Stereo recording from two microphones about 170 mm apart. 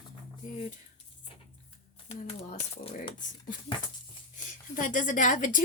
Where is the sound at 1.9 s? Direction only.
40° left (ahead or behind).